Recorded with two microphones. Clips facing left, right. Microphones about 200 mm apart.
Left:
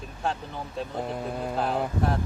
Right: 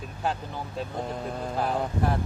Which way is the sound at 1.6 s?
Centre (ahead or behind).